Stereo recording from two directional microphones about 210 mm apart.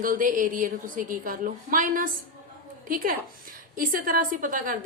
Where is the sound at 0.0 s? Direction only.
40° right (ahead or behind).